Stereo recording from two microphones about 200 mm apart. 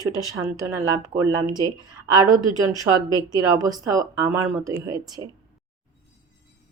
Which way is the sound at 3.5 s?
20° right (ahead or behind).